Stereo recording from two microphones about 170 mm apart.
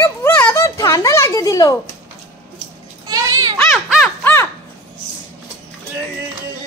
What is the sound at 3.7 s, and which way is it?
Crow, 5° right (ahead or behind).